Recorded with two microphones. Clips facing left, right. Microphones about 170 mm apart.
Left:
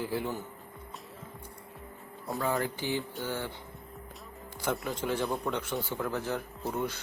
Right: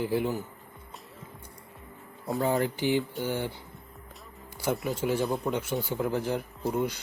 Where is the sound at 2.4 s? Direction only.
25° right (ahead or behind).